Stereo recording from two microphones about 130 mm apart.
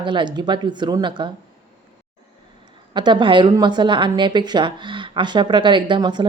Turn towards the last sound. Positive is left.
turn(degrees=-35)  # may be behind; listen again after turning